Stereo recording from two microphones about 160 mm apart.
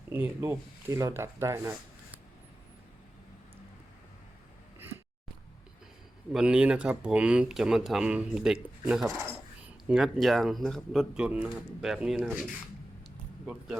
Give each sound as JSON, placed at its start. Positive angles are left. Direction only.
{"t": 0.1, "sound": "speech", "side_deg": -15}
{"t": 6.3, "sound": "speech", "side_deg": -5}